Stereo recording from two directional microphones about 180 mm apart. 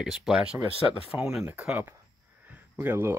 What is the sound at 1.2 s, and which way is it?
Speech, 5° right (ahead or behind).